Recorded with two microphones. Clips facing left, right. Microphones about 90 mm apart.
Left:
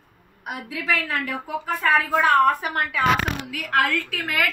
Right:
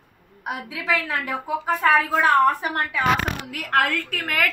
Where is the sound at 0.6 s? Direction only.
20° right (ahead or behind).